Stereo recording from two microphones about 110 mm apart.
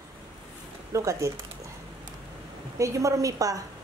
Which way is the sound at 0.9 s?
30° right (ahead or behind).